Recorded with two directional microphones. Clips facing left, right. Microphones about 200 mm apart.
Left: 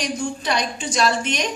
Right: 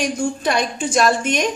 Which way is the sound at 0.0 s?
50° right (ahead or behind).